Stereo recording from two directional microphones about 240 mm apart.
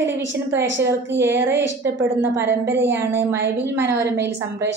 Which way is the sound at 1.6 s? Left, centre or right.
Right.